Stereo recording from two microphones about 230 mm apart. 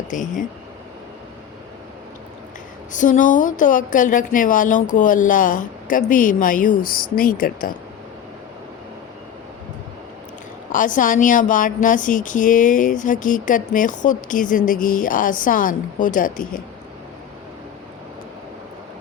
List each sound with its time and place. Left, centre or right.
0.1 s a woman's voice: left
2.9 s a woman's voice: left
10.7 s a woman's voice: left